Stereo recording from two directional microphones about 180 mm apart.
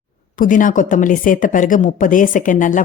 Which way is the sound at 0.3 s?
50° left (ahead or behind).